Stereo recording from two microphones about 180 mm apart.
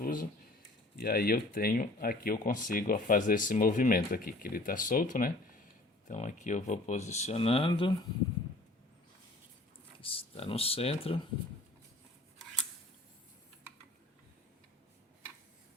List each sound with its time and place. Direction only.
0.0 s speech: 50° left (ahead or behind); by 7.9 s 30° left (ahead or behind)
10.0 s speech: 30° left (ahead or behind)